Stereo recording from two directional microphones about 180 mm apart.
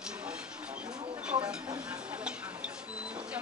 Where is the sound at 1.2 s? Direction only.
5° right (ahead or behind).